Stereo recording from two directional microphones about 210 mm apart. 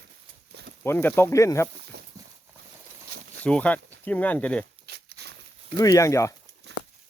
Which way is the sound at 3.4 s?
5° left (ahead or behind).